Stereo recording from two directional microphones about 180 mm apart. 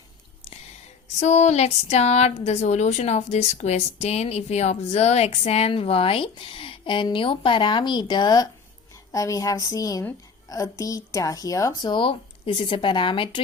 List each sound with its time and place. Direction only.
1.2 s a woman's voice: 40° left (ahead or behind)